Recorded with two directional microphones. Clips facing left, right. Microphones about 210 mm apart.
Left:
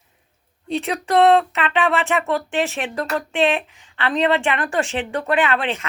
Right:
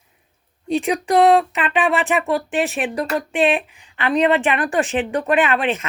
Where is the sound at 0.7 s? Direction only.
15° right (ahead or behind).